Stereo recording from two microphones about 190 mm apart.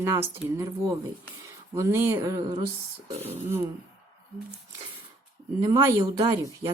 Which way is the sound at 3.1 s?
35° right (ahead or behind).